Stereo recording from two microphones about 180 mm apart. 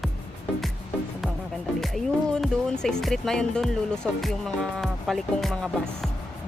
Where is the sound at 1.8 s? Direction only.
Centre (ahead or behind).